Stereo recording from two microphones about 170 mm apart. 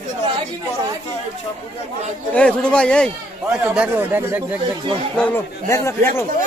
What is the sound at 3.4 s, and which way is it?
Speech, 5° right (ahead or behind).